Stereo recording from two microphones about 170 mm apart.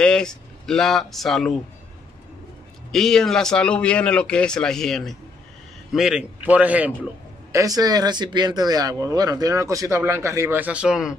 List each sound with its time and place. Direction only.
0.0 s speech: 5° left (ahead or behind)
2.9 s a man's voice: 5° left (ahead or behind)
7.5 s speech: 20° right (ahead or behind); by 11.1 s 5° right (ahead or behind)